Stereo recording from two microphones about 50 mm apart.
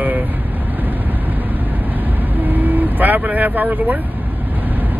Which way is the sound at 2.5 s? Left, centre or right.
Right.